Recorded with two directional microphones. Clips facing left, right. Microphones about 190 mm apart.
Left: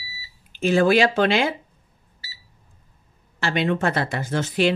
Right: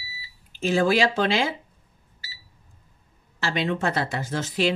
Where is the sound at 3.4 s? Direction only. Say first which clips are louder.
Left 3 dB; 60° left (ahead or behind).